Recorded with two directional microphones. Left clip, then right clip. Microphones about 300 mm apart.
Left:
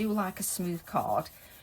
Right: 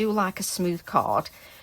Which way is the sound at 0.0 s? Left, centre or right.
Centre.